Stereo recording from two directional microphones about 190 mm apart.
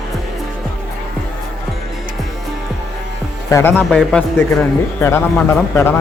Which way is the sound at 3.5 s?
10° left (ahead or behind).